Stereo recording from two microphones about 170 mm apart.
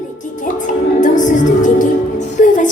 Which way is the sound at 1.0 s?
50° left (ahead or behind).